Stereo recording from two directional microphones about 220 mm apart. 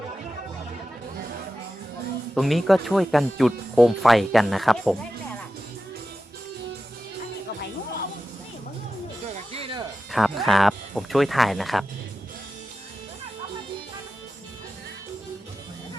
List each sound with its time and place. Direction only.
2.3 s speech: centre (ahead or behind)
9.3 s music: 25° right (ahead or behind)
10.1 s speech: centre (ahead or behind)